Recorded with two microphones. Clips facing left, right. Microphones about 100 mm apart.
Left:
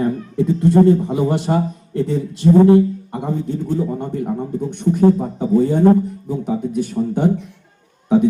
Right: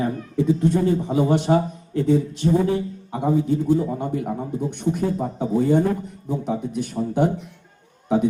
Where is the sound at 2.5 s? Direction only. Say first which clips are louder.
Left 10 dB; 50° left (ahead or behind).